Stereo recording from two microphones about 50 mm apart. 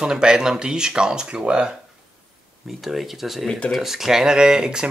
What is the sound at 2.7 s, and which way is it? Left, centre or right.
Speech, centre.